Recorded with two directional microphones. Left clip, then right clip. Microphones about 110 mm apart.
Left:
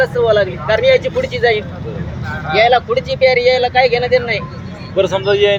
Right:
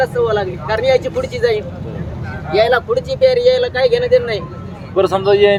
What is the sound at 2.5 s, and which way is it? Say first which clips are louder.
Speech: left 2 dB; 35° right (ahead or behind).